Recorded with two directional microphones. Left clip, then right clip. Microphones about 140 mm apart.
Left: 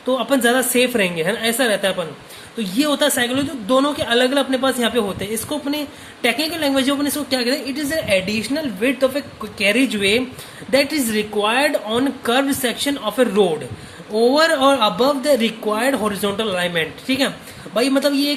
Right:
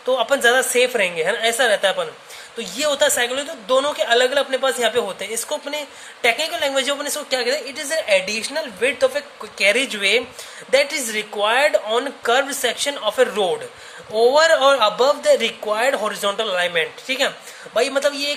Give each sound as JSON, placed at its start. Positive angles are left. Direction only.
{"t": 0.1, "sound": "a woman's voice", "side_deg": -20}